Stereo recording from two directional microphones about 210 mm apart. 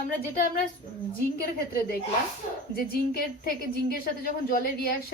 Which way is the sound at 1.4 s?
45° left (ahead or behind).